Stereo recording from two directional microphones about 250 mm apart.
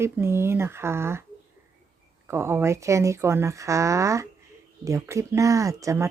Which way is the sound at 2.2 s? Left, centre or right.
Centre.